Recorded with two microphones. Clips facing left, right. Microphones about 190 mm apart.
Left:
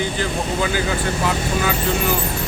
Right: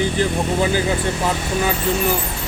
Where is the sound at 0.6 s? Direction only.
30° right (ahead or behind).